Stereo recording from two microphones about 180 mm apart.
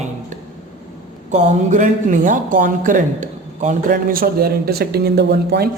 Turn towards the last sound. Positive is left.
turn(degrees=-65)  # may be behind; listen again after turning